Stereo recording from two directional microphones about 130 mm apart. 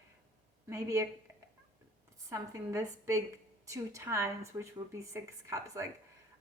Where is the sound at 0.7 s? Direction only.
25° right (ahead or behind).